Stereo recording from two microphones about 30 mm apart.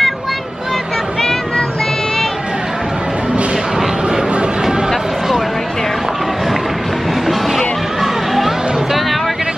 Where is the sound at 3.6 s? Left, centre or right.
Centre.